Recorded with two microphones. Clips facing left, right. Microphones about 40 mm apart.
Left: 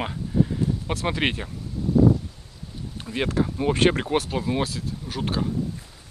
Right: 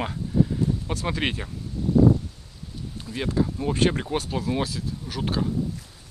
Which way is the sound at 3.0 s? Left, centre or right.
Left.